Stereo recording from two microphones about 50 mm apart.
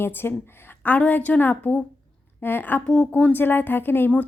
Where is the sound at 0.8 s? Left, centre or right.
Left.